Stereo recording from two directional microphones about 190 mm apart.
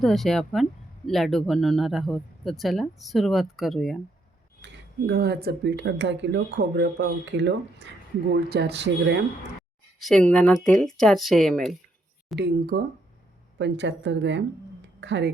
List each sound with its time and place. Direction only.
0.0 s speech: centre (ahead or behind)
4.6 s speech: 60° right (ahead or behind)
10.0 s speech: 5° left (ahead or behind)
12.4 s speech: 55° right (ahead or behind)
13.6 s speech: 70° right (ahead or behind)